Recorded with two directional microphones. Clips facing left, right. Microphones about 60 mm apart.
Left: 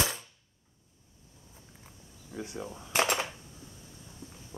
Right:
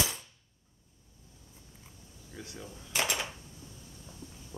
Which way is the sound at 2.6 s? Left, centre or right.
Left.